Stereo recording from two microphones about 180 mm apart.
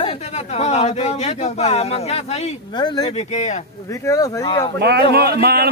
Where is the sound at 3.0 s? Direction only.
40° left (ahead or behind).